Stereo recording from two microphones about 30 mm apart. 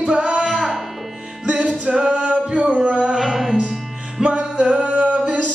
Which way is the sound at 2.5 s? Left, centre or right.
Right.